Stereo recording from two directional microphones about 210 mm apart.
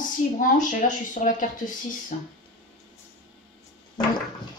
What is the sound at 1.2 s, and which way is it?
Speech, 35° left (ahead or behind).